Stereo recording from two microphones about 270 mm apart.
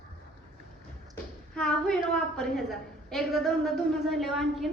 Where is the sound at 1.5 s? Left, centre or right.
Centre.